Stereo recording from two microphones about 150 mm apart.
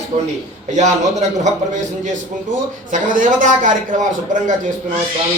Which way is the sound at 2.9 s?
60° right (ahead or behind).